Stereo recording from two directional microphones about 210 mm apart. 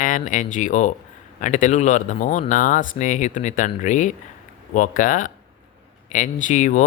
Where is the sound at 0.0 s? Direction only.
35° left (ahead or behind).